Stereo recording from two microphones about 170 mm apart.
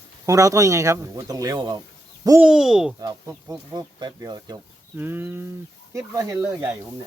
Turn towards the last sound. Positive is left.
turn(degrees=-15)  # may be behind; listen again after turning